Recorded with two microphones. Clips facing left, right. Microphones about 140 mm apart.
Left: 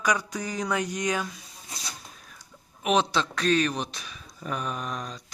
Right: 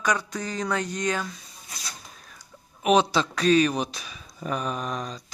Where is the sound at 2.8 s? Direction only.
Centre (ahead or behind).